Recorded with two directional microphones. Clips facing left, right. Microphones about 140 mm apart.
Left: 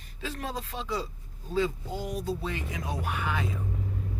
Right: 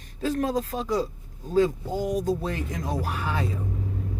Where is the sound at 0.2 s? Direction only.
45° right (ahead or behind).